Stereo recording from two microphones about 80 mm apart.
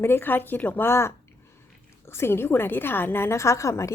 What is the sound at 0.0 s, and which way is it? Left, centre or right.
A woman's voice, left.